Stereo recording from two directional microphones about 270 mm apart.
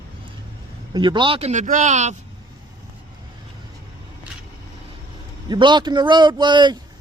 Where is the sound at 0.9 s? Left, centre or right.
Centre.